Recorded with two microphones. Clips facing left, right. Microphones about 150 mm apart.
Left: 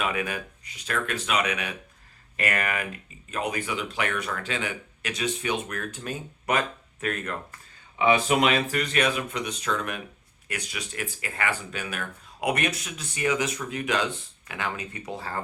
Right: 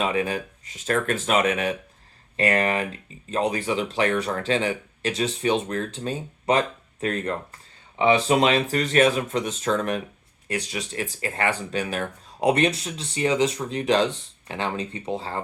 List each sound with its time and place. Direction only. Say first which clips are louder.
0.0 s speech: right 5 dB; 30° right (ahead or behind)
2.3 s speech: right 6 dB; 30° right (ahead or behind)